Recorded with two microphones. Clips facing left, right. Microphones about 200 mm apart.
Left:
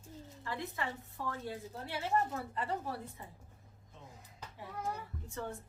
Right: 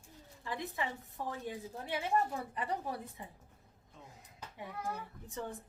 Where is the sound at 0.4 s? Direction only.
20° right (ahead or behind).